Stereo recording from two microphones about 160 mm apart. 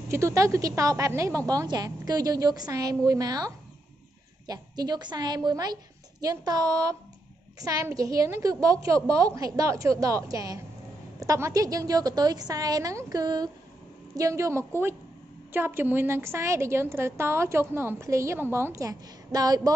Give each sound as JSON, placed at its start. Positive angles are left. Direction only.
{"t": 0.1, "sound": "a woman's voice", "side_deg": -20}